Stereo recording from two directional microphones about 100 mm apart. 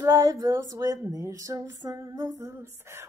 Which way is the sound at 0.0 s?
35° right (ahead or behind).